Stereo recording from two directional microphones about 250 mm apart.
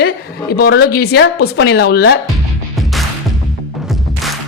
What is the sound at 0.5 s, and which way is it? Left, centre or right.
A woman's voice, left.